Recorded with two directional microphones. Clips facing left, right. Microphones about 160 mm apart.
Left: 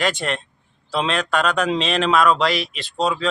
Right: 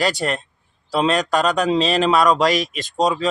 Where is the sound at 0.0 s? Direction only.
35° right (ahead or behind).